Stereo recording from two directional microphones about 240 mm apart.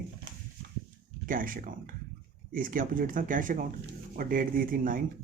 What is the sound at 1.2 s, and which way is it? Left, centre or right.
Speech, right.